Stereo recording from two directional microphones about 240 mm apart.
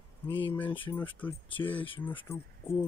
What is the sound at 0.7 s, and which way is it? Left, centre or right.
Speech, left.